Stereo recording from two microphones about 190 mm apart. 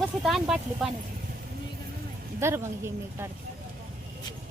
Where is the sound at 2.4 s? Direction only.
15° right (ahead or behind).